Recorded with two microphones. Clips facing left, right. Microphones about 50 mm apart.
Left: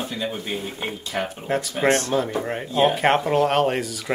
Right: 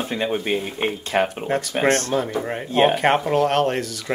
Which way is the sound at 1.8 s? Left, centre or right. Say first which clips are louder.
Right 1 dB; right.